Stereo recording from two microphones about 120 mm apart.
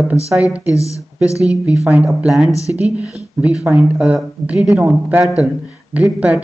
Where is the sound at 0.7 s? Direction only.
25° left (ahead or behind).